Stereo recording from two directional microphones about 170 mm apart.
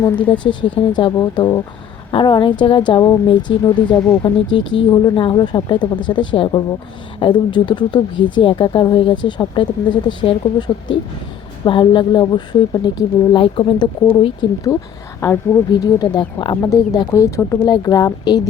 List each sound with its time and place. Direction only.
0.3 s speech: 30° left (ahead or behind)
15.2 s a woman's voice: 15° left (ahead or behind)
15.7 s speech: 25° left (ahead or behind)